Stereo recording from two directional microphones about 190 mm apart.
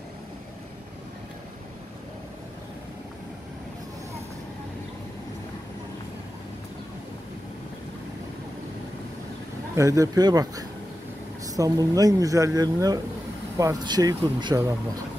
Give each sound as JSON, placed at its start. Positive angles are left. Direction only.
{"t": 9.8, "sound": "speech", "side_deg": -15}